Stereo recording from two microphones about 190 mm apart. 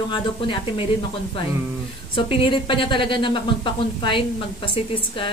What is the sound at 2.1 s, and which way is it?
A woman's voice, 25° left (ahead or behind).